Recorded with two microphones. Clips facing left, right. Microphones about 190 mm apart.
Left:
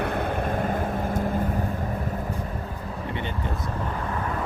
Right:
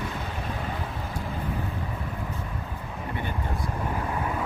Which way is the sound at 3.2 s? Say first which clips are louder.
Right 1 dB; 20° left (ahead or behind).